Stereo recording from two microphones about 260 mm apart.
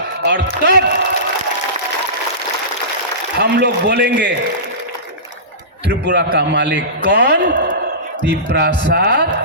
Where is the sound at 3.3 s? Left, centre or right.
Right.